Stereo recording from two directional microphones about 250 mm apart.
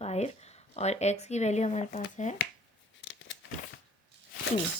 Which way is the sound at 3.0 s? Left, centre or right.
Left.